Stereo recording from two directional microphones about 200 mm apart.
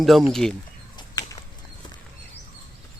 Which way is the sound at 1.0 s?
20° left (ahead or behind).